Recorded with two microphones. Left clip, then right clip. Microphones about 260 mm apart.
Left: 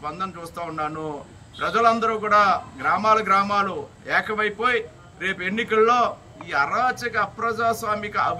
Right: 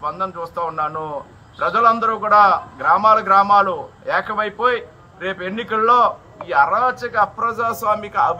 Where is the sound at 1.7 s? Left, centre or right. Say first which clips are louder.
Right 4 dB; left.